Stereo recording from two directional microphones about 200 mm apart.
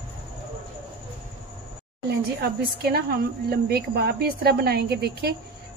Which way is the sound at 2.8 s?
50° right (ahead or behind).